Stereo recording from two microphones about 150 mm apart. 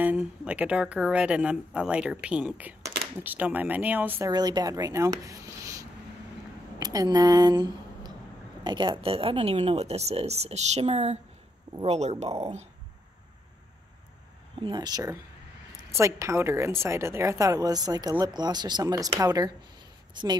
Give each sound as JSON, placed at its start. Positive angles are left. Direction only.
{"t": 0.0, "sound": "speech", "side_deg": -10}
{"t": 4.3, "sound": "speech", "side_deg": -25}
{"t": 14.6, "sound": "a woman's voice", "side_deg": -30}